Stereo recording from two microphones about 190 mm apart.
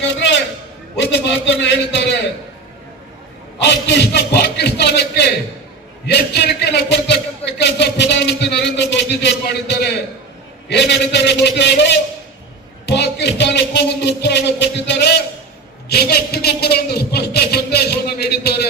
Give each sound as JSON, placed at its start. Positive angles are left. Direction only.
{"t": 0.0, "sound": "a sound", "side_deg": 70}
{"t": 0.9, "sound": "a man's voice", "side_deg": 70}
{"t": 3.6, "sound": "a man's voice", "side_deg": 65}